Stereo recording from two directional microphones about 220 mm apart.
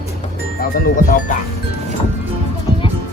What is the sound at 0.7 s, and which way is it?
Speech, 40° left (ahead or behind).